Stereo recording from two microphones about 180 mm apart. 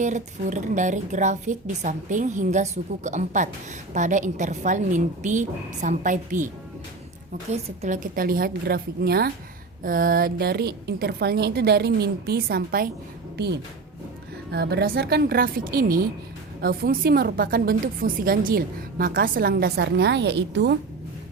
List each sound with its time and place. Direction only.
0.0 s speech: 45° right (ahead or behind)
7.5 s a woman's voice: 40° right (ahead or behind); by 12.9 s 55° right (ahead or behind)
13.3 s a woman's voice: 70° right (ahead or behind)